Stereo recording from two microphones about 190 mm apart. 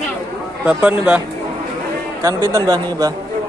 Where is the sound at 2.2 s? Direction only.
15° right (ahead or behind).